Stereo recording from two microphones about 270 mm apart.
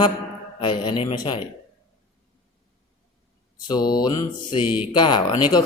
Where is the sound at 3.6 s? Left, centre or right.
Centre.